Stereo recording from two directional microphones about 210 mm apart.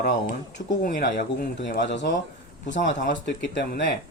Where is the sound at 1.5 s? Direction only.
55° left (ahead or behind).